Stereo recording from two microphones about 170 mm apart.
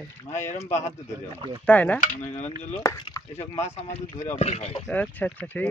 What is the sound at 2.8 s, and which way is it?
Speech, 20° left (ahead or behind).